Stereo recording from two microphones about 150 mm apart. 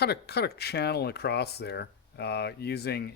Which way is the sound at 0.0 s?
90° left.